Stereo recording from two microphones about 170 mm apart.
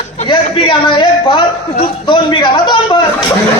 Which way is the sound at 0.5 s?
30° left (ahead or behind).